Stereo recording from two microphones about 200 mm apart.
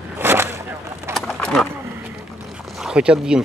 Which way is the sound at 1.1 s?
Centre (ahead or behind).